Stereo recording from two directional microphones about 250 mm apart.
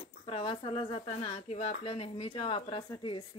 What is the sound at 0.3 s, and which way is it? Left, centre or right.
Speech, left.